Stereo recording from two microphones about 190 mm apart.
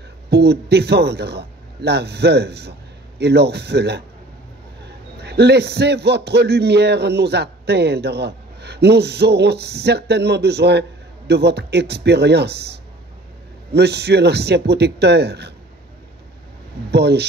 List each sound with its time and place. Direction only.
0.3 s a man's voice: 60° right (ahead or behind)
13.7 s a man's voice: 60° right (ahead or behind)
16.9 s a man's voice: 60° right (ahead or behind)